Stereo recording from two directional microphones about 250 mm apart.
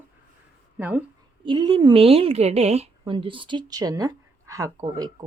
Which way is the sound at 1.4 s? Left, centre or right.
Centre.